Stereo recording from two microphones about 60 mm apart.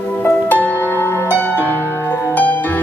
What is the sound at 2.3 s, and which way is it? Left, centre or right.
Music, left.